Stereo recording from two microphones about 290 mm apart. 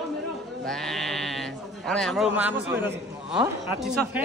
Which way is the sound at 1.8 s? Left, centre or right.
Centre.